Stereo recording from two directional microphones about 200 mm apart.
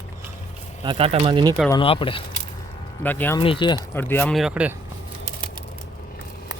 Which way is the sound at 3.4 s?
25° left (ahead or behind).